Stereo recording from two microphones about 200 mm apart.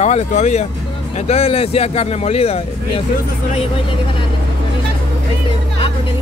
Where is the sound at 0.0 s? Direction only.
35° left (ahead or behind).